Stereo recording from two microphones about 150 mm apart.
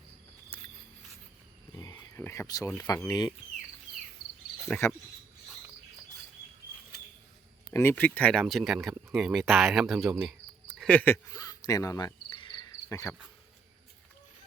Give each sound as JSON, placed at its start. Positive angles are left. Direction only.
{"t": 1.7, "sound": "a sound", "side_deg": 25}
{"t": 2.8, "sound": "speech", "side_deg": 25}
{"t": 4.8, "sound": "speech", "side_deg": 20}
{"t": 7.7, "sound": "speech", "side_deg": 15}
{"t": 10.8, "sound": "speech", "side_deg": 10}
{"t": 11.3, "sound": "cricket", "side_deg": 25}